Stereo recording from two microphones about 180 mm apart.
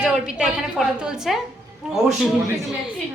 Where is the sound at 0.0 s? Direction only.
5° right (ahead or behind).